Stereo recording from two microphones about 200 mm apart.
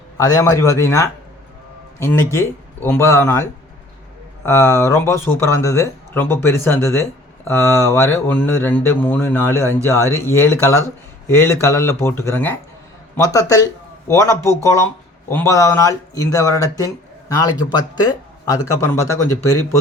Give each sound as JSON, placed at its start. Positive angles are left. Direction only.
{"t": 0.2, "sound": "a man's voice", "side_deg": 15}